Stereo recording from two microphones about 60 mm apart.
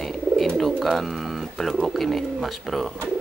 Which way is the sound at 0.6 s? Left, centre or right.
Centre.